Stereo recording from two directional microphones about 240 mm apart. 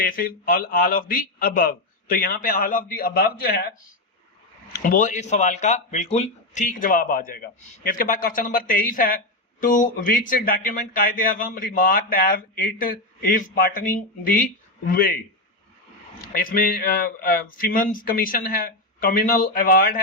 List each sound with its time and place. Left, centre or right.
0.0 s speech: left
4.8 s speech: left
16.3 s speech: left